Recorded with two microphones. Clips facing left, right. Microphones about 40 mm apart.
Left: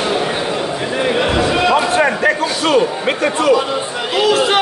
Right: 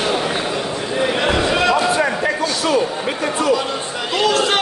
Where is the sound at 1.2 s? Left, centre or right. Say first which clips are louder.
Left 2 dB; centre.